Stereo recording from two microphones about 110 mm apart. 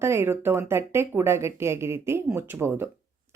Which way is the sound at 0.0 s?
25° right (ahead or behind).